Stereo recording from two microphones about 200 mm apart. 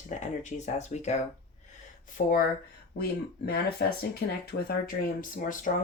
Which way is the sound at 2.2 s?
45° left (ahead or behind).